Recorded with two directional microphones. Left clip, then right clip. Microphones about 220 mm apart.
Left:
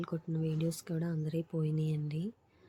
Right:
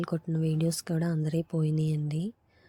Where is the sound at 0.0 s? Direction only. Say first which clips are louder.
Right 6 dB; 25° right (ahead or behind).